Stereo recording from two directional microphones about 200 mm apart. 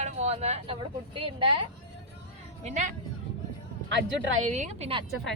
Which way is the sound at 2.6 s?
35° right (ahead or behind).